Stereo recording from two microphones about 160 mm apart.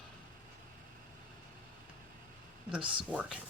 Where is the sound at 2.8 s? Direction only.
30° right (ahead or behind).